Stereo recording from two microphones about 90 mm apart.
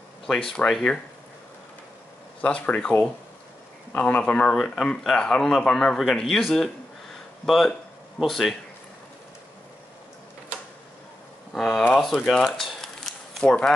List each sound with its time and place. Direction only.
0.7 s speech: centre (ahead or behind)
2.4 s speech: 15° left (ahead or behind)
4.0 s speech: 10° left (ahead or behind)
11.5 s speech: 5° left (ahead or behind)
12.0 s a sound: centre (ahead or behind)